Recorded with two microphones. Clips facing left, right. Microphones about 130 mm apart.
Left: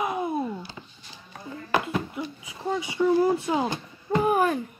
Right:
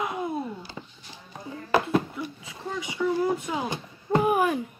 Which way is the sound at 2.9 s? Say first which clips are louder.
Left 4 dB; 35° left (ahead or behind).